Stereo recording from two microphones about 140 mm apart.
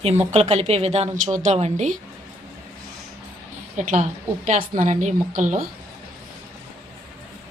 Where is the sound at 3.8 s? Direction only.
60° right (ahead or behind).